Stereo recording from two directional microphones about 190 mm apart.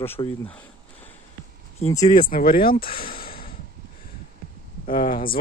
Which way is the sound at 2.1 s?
45° left (ahead or behind).